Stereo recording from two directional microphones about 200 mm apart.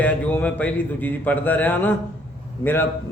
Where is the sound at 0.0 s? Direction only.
5° left (ahead or behind).